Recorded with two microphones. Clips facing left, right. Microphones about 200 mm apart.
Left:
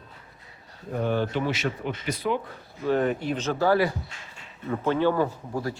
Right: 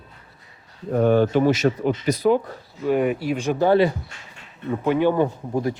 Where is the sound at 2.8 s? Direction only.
10° right (ahead or behind).